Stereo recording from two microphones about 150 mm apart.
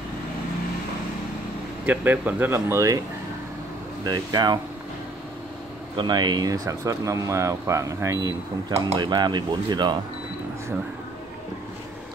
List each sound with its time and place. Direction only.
1.9 s speech: 10° right (ahead or behind)
4.0 s speech: 25° right (ahead or behind)
5.9 s speech: 30° right (ahead or behind)